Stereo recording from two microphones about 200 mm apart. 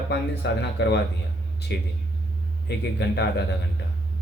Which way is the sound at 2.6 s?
55° left (ahead or behind).